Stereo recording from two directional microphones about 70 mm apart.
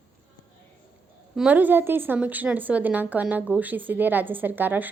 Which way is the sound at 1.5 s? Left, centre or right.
Right.